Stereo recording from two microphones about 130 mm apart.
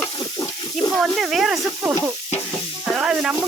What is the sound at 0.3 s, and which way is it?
Water tap, 30° left (ahead or behind).